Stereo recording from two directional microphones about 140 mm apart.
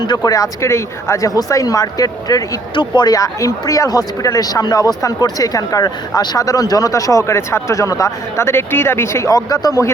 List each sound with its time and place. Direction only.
0.1 s speech: 25° left (ahead or behind)